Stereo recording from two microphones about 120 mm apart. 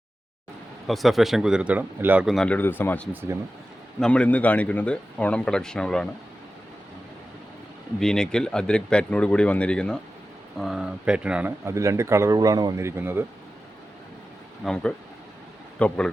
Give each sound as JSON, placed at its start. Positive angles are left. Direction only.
{"t": 0.9, "sound": "speech", "side_deg": 0}
{"t": 2.2, "sound": "speech", "side_deg": 5}
{"t": 2.6, "sound": "a man's voice", "side_deg": 15}
{"t": 3.1, "sound": "speech", "side_deg": -15}
{"t": 4.0, "sound": "a man's voice", "side_deg": 10}
{"t": 7.9, "sound": "a man's voice", "side_deg": 5}
{"t": 10.6, "sound": "speech", "side_deg": -5}
{"t": 11.6, "sound": "speech", "side_deg": -25}
{"t": 14.6, "sound": "a man's voice", "side_deg": 5}